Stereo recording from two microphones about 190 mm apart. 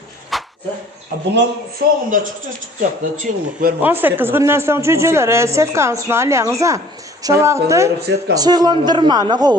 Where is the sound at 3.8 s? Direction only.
10° right (ahead or behind).